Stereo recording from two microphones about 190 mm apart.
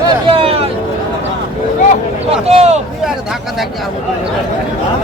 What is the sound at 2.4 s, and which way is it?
Speech, 30° right (ahead or behind).